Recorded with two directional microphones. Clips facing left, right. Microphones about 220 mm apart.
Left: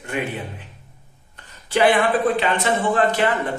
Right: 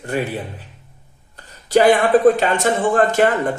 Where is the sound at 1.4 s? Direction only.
40° right (ahead or behind).